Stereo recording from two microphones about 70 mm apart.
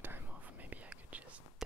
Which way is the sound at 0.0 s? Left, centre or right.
Right.